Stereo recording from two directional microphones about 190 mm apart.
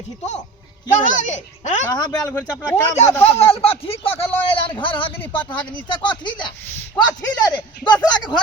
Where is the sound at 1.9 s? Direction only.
20° left (ahead or behind).